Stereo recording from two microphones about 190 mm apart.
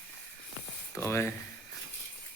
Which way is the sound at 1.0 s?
15° left (ahead or behind).